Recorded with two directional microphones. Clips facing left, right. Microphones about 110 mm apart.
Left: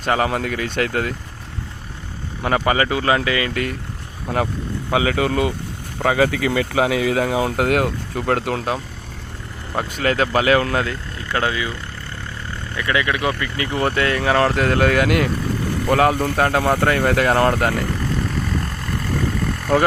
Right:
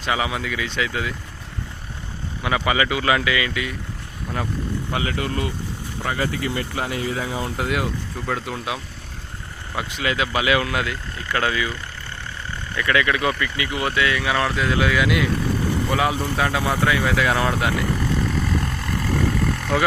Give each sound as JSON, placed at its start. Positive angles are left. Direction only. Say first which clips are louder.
{"t": 0.0, "sound": "speech", "louder": "left 4 dB", "side_deg": 50}
{"t": 2.4, "sound": "speech", "louder": "left 3 dB", "side_deg": 40}
{"t": 4.9, "sound": "speech", "louder": "left 9 dB", "side_deg": 90}
{"t": 6.0, "sound": "speech", "louder": "left 7 dB", "side_deg": 80}
{"t": 9.7, "sound": "speech", "louder": "left 4 dB", "side_deg": 45}
{"t": 12.7, "sound": "speech", "louder": "even", "side_deg": 20}
{"t": 13.6, "sound": "speech", "louder": "left 3 dB", "side_deg": 40}
{"t": 18.1, "sound": "vehicle", "louder": "even", "side_deg": 0}